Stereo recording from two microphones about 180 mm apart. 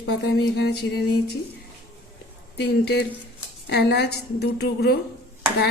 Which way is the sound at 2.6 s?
60° left (ahead or behind).